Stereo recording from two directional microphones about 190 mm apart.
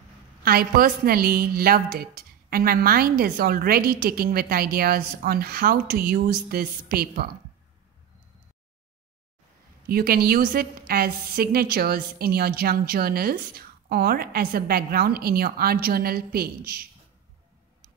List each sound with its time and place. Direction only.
0.4 s a woman's voice: 50° right (ahead or behind)
9.8 s a woman's voice: 50° right (ahead or behind)